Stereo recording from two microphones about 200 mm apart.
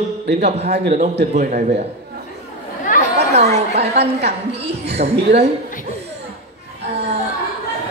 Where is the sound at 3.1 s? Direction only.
35° right (ahead or behind).